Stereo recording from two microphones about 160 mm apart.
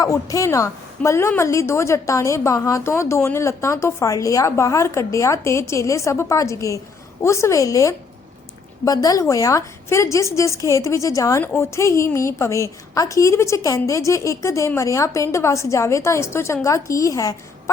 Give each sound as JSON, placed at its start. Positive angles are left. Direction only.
{"t": 0.0, "sound": "a woman's voice", "side_deg": 20}